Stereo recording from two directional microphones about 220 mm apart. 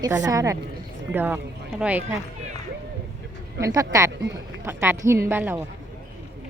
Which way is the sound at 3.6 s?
15° right (ahead or behind).